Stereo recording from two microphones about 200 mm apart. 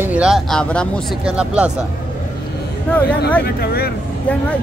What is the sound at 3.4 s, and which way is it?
Speech, 50° left (ahead or behind).